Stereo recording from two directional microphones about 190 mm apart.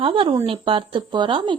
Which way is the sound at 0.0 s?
25° right (ahead or behind).